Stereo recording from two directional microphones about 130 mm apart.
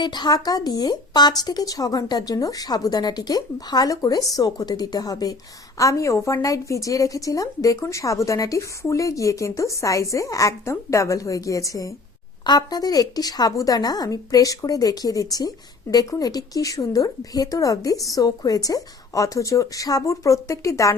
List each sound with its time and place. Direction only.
0.0 s a woman's voice: 35° left (ahead or behind)